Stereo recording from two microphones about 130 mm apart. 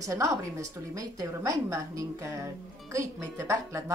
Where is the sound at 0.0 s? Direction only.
25° right (ahead or behind).